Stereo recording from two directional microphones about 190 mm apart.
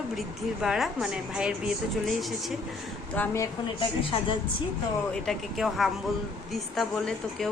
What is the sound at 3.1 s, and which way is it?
Speech, 10° left (ahead or behind).